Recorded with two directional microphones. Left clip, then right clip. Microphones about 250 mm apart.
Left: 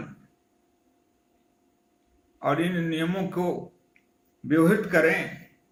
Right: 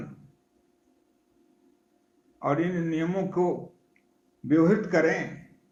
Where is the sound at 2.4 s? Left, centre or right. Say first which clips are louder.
Left 1 dB; centre.